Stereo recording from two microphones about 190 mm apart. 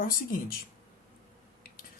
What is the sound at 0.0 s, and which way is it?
Speech, 45° left (ahead or behind).